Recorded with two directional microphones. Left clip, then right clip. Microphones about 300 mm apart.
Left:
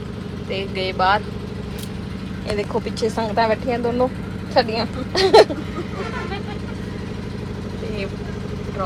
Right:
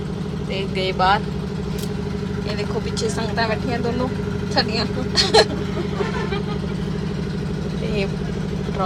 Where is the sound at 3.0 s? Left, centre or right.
Centre.